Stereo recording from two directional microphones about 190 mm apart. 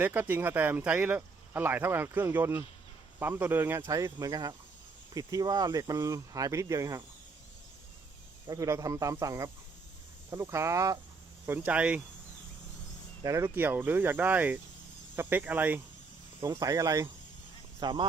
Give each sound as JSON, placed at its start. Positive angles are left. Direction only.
{"t": 0.0, "sound": "speech", "side_deg": -10}
{"t": 8.4, "sound": "speech", "side_deg": -15}
{"t": 13.2, "sound": "speech", "side_deg": -15}